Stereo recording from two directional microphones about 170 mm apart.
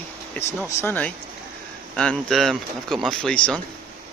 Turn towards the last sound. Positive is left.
turn(degrees=5)  # may be behind; listen again after turning